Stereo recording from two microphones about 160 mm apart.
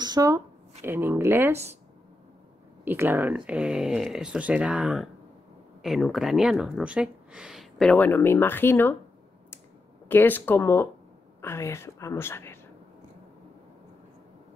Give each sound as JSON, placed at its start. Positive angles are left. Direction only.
{"t": 0.0, "sound": "a sound", "side_deg": -25}
{"t": 0.8, "sound": "speech", "side_deg": -15}
{"t": 2.8, "sound": "speech", "side_deg": -15}
{"t": 5.8, "sound": "a sound", "side_deg": 0}
{"t": 6.1, "sound": "speech", "side_deg": 0}
{"t": 10.0, "sound": "speech", "side_deg": 10}